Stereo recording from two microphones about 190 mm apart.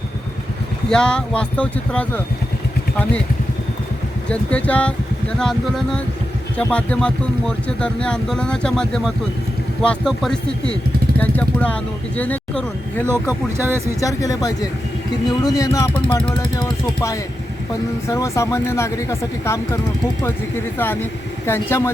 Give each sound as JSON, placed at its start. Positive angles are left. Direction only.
{"t": 0.9, "sound": "speech", "side_deg": 5}
{"t": 4.3, "sound": "speech", "side_deg": 5}
{"t": 13.1, "sound": "speech", "side_deg": -10}
{"t": 14.0, "sound": "speech", "side_deg": 15}
{"t": 16.3, "sound": "speech", "side_deg": 15}
{"t": 20.7, "sound": "speech", "side_deg": 10}